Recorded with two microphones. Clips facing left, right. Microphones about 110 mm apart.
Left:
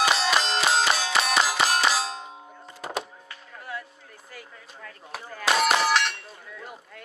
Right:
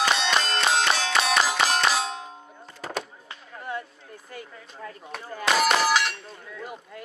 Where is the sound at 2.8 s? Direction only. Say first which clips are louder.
Even; 10° left (ahead or behind).